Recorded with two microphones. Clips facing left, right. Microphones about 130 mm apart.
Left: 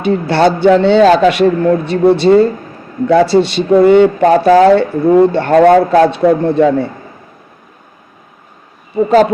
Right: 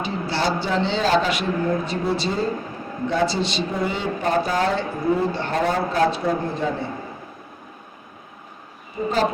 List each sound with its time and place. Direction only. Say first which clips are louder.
0.0 s a man's voice: left 13 dB; 65° left (ahead or behind)
9.0 s a man's voice: left 14 dB; 75° left (ahead or behind)